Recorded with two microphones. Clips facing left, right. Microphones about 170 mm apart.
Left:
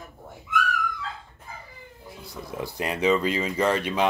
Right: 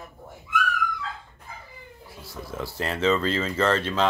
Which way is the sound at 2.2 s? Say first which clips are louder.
Even; 20° left (ahead or behind).